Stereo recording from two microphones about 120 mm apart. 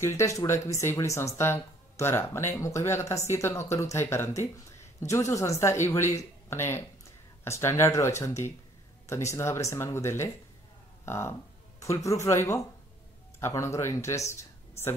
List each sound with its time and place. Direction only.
0.0 s speech: 20° left (ahead or behind)